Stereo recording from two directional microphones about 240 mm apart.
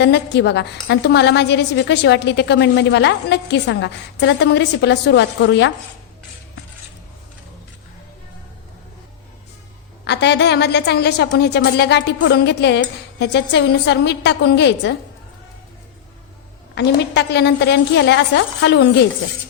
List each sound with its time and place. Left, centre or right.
0.0 s a woman's voice: left
10.0 s a woman's voice: left
16.7 s a woman's voice: left